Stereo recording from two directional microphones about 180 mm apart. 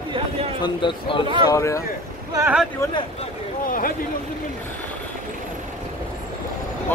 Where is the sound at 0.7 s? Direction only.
25° left (ahead or behind).